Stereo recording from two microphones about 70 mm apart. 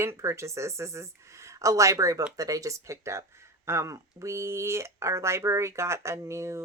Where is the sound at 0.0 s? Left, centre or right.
Right.